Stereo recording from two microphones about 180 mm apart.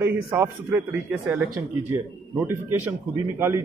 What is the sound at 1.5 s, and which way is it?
A man's voice, 15° right (ahead or behind).